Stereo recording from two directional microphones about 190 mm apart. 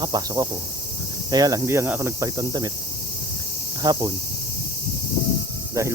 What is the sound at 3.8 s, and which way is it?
Speech, 20° right (ahead or behind).